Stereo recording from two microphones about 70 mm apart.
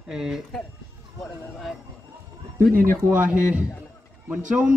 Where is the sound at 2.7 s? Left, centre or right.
Right.